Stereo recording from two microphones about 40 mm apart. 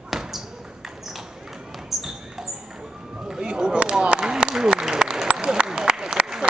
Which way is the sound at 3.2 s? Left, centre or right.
Centre.